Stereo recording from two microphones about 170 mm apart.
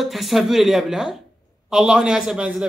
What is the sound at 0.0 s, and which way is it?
Speech, centre (ahead or behind).